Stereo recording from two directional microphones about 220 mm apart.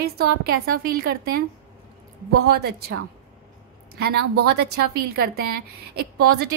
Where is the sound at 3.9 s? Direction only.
45° right (ahead or behind).